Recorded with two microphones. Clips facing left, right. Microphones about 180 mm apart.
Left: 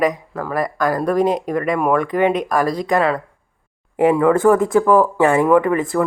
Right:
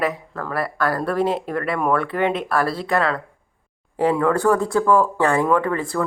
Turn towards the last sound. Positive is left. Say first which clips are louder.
# left 5 dB
turn(degrees=15)  # may be behind; listen again after turning